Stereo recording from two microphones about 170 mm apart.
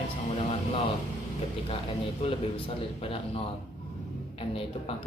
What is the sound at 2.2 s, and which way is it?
Speech, 35° left (ahead or behind).